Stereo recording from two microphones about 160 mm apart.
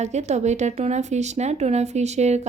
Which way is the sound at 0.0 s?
45° right (ahead or behind).